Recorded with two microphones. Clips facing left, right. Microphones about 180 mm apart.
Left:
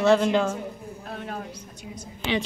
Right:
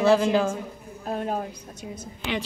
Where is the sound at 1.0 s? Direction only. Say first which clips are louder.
Right 8 dB; 45° right (ahead or behind).